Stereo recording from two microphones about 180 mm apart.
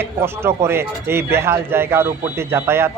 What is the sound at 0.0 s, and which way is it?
Speech, 15° right (ahead or behind).